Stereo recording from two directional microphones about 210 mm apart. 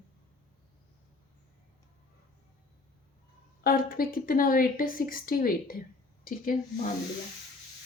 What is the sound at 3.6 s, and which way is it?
A woman's voice, 45° left (ahead or behind).